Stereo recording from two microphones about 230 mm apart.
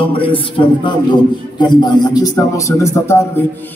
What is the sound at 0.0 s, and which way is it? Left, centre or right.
A man's voice, left.